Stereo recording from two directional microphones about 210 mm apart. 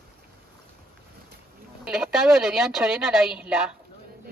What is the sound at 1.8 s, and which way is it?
A woman's voice, 5° right (ahead or behind).